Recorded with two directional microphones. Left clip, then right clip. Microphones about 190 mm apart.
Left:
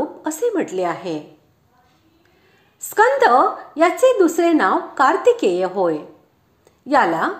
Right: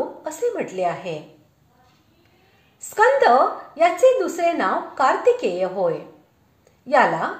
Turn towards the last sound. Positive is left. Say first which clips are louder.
# left 1 dB
turn(degrees=30)  # may be behind; listen again after turning